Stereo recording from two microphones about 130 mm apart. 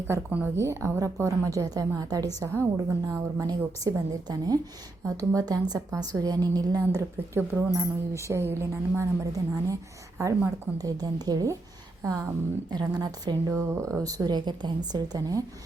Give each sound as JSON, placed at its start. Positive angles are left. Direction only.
{"t": 0.1, "sound": "a woman's voice", "side_deg": -15}